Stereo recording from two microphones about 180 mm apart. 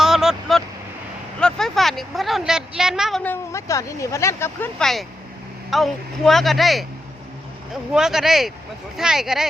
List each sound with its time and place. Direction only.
0.0 s vehicle: 5° right (ahead or behind)
1.4 s a woman's voice: 5° left (ahead or behind)
4.8 s speech: centre (ahead or behind)
7.9 s speech: 5° right (ahead or behind)